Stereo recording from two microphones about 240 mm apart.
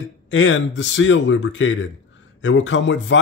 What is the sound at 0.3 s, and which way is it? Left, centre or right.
Speech, left.